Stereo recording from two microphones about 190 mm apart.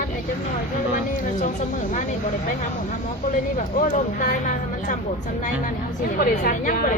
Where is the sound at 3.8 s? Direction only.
45° left (ahead or behind).